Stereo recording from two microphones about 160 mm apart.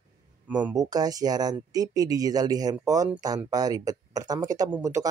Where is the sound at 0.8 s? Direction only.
25° right (ahead or behind).